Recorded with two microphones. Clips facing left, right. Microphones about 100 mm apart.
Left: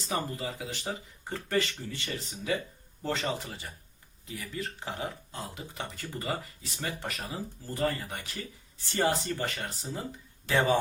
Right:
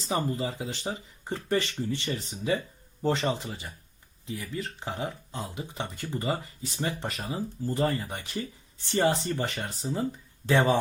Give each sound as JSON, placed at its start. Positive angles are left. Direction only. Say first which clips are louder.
{"t": 0.0, "sound": "speech", "louder": "right 4 dB", "side_deg": -25}